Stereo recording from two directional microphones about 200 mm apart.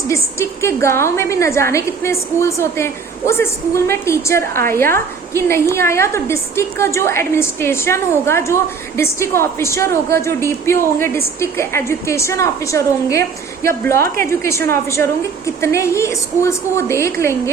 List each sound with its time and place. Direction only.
0.1 s a woman's voice: 15° left (ahead or behind)